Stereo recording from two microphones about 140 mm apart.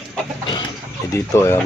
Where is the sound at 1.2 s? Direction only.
20° left (ahead or behind).